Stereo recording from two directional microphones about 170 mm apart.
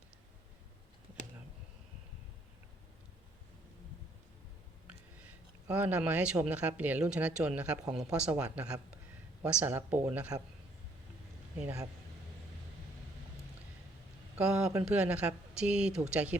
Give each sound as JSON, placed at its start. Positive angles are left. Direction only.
{"t": 4.9, "sound": "a sound", "side_deg": -10}
{"t": 6.4, "sound": "speech", "side_deg": -10}
{"t": 11.6, "sound": "speech", "side_deg": -20}
{"t": 14.3, "sound": "speech", "side_deg": -5}